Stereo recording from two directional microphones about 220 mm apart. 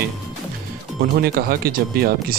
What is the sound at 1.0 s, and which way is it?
Speech, 45° right (ahead or behind).